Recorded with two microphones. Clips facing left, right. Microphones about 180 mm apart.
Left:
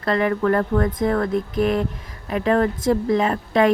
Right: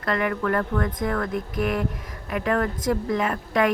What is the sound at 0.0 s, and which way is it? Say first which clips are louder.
A woman's voice: left 5 dB; 30° left (ahead or behind).